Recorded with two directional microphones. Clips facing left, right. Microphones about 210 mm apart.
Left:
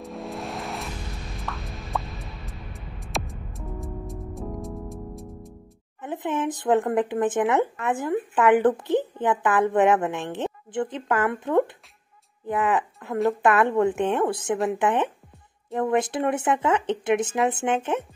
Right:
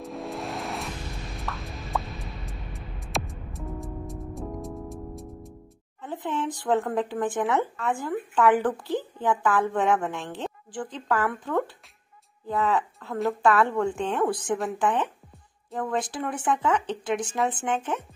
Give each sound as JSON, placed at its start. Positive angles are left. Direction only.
{"t": 0.0, "sound": "music", "side_deg": 0}
{"t": 6.0, "sound": "speech", "side_deg": 20}